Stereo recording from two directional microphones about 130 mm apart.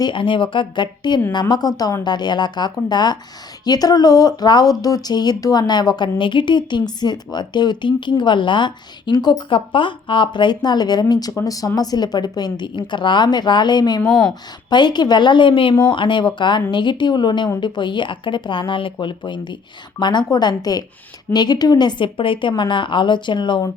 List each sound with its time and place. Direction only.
0.0 s speech: 40° left (ahead or behind)
14.1 s a woman's voice: 5° left (ahead or behind)
14.7 s speech: 35° left (ahead or behind)